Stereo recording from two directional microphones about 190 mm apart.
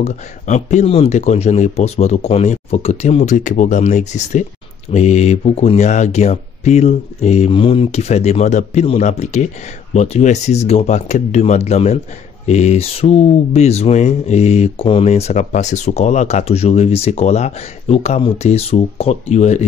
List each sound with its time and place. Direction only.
0.0 s speech: 35° left (ahead or behind)